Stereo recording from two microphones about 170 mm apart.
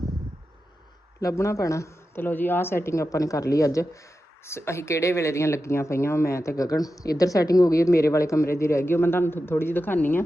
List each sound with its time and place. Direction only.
1.2 s a woman's voice: 20° left (ahead or behind)